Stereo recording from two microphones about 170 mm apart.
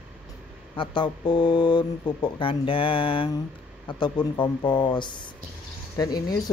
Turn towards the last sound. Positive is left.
turn(degrees=25)  # may be behind; listen again after turning